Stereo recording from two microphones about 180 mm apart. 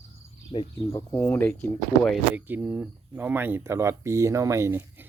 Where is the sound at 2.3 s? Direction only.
10° right (ahead or behind).